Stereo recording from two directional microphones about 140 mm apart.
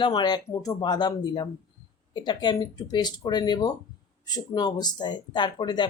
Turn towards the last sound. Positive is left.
turn(degrees=30)  # may be behind; listen again after turning